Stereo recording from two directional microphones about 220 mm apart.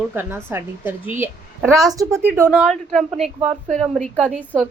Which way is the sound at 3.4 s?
30° right (ahead or behind).